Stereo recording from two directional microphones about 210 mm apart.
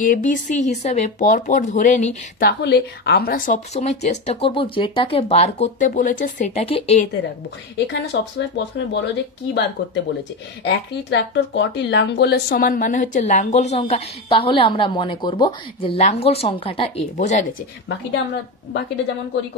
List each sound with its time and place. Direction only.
0.0 s speech: 40° left (ahead or behind)
2.4 s speech: 50° left (ahead or behind); by 7.1 s 25° left (ahead or behind)
7.7 s speech: 55° left (ahead or behind)
10.6 s speech: 55° left (ahead or behind); by 17.5 s 35° left (ahead or behind)